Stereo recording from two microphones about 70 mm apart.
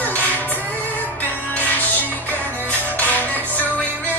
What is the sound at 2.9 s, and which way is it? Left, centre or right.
Music, left.